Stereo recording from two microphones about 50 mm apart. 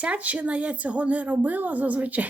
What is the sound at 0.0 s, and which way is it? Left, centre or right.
A woman's voice, right.